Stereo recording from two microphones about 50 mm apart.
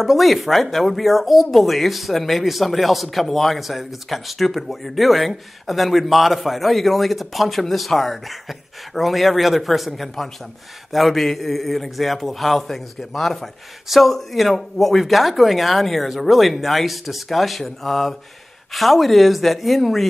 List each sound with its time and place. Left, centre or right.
0.0 s speech: centre